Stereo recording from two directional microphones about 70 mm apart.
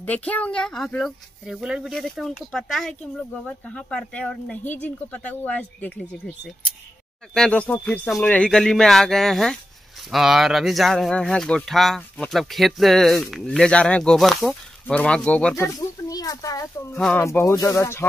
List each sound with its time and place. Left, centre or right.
0.0 s a child's voice: left; by 1.1 s centre
1.4 s speech: centre
1.9 s speech: centre
3.0 s speech: centre
5.9 s a child's voice: centre
8.5 s a child's voice: centre
14.1 s speech: centre
15.0 s a child's voice: centre
15.5 s speech: left
17.2 s speech: left